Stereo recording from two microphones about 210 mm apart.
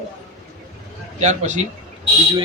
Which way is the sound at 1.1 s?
35° right (ahead or behind).